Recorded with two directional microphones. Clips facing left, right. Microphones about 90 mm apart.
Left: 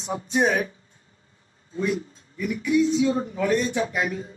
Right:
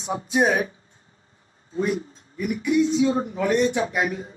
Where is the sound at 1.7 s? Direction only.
35° right (ahead or behind).